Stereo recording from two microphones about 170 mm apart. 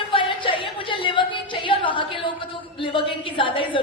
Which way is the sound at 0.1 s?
30° left (ahead or behind).